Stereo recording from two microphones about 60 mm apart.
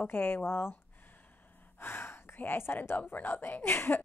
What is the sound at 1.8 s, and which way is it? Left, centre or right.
Gasp, left.